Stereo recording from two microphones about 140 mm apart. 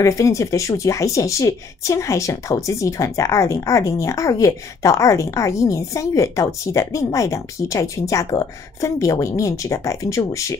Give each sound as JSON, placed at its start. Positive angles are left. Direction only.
{"t": 0.0, "sound": "speech", "side_deg": 25}